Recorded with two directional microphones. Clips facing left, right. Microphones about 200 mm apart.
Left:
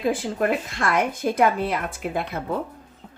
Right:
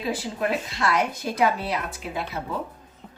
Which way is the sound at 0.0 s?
50° left (ahead or behind).